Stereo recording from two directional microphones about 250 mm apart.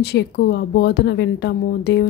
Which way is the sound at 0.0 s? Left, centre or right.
Left.